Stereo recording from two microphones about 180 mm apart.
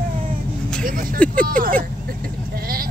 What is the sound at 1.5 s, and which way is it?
Bleat, 50° right (ahead or behind).